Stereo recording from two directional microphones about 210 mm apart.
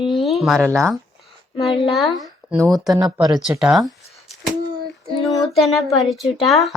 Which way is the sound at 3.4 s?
5° right (ahead or behind).